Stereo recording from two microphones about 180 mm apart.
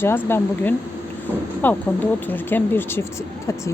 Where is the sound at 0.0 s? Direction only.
15° left (ahead or behind).